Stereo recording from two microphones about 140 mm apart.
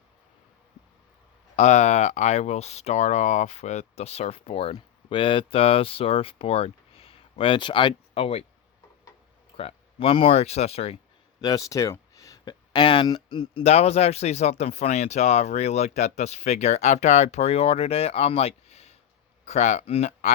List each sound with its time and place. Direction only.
1.5 s speech: 55° left (ahead or behind)
9.6 s speech: 45° left (ahead or behind)
11.3 s speech: 25° left (ahead or behind)
13.6 s speech: 50° left (ahead or behind)